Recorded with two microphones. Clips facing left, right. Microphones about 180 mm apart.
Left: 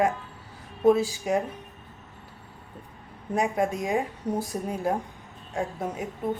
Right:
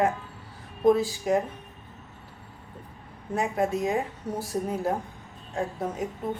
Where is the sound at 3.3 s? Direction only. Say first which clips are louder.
Left 1 dB; 15° left (ahead or behind).